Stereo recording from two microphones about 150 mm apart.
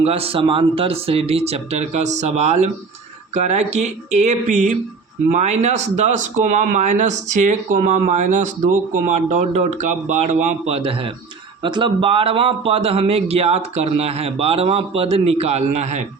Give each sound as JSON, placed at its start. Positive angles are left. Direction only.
{"t": 0.0, "sound": "speech", "side_deg": -40}